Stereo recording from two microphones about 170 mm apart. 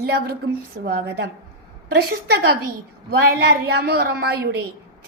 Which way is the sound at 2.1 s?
70° right (ahead or behind).